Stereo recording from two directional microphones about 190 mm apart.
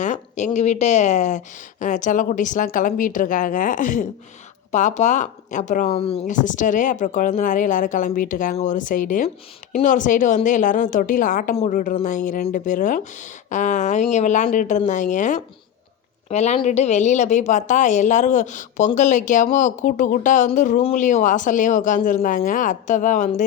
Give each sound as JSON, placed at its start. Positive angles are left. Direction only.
{"t": 0.0, "sound": "speech", "side_deg": 40}
{"t": 6.2, "sound": "a woman's voice", "side_deg": 40}